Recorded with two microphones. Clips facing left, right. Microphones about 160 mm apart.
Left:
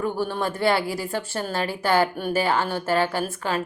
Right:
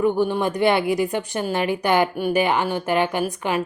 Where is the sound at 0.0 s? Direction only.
15° right (ahead or behind).